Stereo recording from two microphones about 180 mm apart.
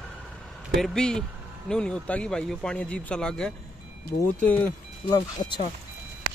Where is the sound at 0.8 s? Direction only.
5° left (ahead or behind).